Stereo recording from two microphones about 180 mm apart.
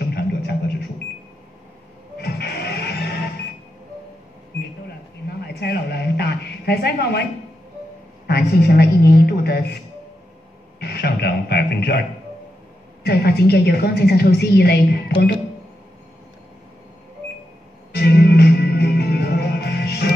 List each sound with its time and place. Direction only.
0.0 s a sound: 65° left (ahead or behind)
2.1 s music: 65° left (ahead or behind)
5.4 s a sound: 65° left (ahead or behind)
8.3 s a woman's voice: 65° left (ahead or behind)
10.8 s a man's voice: 65° left (ahead or behind)
13.0 s a woman's voice: 60° left (ahead or behind)
17.9 s music: 65° left (ahead or behind)